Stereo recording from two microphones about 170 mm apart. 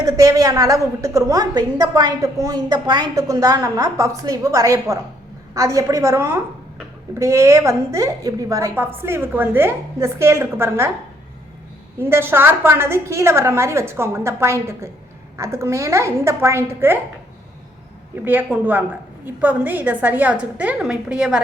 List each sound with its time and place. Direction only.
0.0 s a woman's voice: 20° right (ahead or behind)
11.9 s a woman's voice: 15° right (ahead or behind)
18.3 s a woman's voice: 10° right (ahead or behind)